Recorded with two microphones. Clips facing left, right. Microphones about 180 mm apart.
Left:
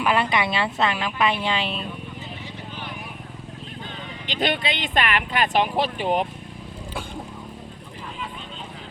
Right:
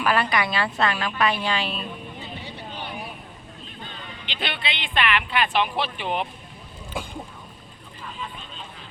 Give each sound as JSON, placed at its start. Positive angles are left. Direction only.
{"t": 0.0, "sound": "a woman's voice", "side_deg": 20}
{"t": 4.3, "sound": "speech", "side_deg": 45}